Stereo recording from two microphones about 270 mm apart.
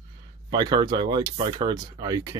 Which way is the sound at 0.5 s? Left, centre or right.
Centre.